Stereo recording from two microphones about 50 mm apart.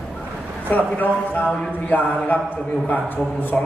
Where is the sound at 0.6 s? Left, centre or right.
Left.